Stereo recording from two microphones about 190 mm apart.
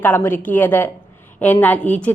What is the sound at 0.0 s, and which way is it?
A woman's voice, 10° left (ahead or behind).